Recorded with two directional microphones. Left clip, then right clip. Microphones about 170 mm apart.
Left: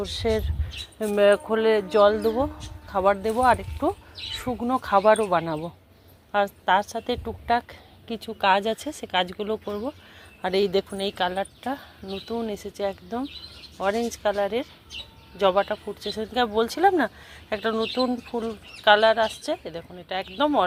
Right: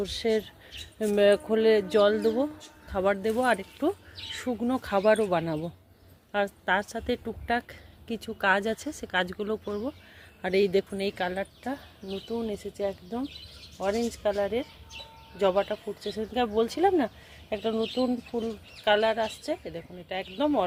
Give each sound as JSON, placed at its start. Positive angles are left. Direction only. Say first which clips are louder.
{"t": 0.0, "sound": "a woman's voice", "louder": "left 2 dB", "side_deg": -25}